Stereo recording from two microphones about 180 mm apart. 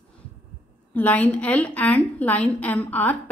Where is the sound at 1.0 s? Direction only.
10° left (ahead or behind).